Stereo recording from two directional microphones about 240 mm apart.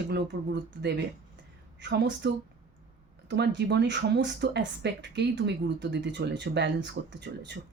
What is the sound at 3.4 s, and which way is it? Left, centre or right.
Speech, right.